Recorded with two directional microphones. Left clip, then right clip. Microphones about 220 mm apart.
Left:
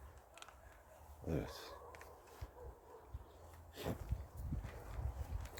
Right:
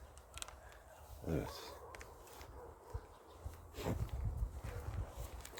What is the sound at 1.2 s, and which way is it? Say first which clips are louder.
Dog: right 2 dB; centre (ahead or behind).